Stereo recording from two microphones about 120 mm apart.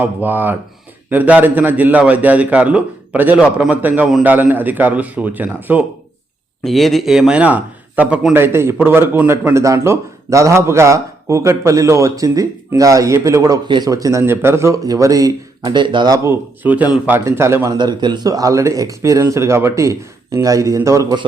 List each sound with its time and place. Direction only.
0.0 s a man's voice: 15° right (ahead or behind)
6.7 s a man's voice: centre (ahead or behind); by 16.1 s 40° right (ahead or behind)
16.1 s speech: 25° right (ahead or behind)
16.6 s a man's voice: 15° right (ahead or behind)
17.7 s speech: 40° right (ahead or behind)